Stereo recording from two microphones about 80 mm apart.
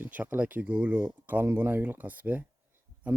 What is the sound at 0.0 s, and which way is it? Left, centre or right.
Speech, right.